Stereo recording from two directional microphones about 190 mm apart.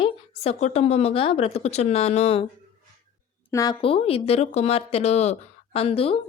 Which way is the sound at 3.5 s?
20° left (ahead or behind).